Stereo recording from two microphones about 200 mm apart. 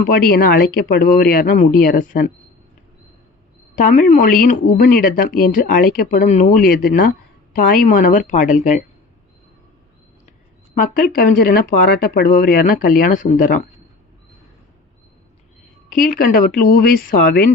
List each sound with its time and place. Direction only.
0.1 s speech: 50° left (ahead or behind)
3.8 s a woman's voice: 40° left (ahead or behind)
10.8 s speech: 45° left (ahead or behind)
15.9 s speech: 45° left (ahead or behind)